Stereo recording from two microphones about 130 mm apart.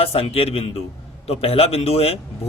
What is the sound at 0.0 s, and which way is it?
Speech, 50° left (ahead or behind).